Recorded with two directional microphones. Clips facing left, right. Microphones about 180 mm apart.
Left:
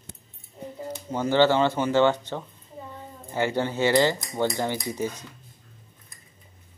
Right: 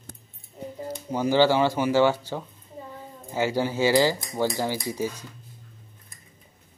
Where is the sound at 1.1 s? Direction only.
10° right (ahead or behind).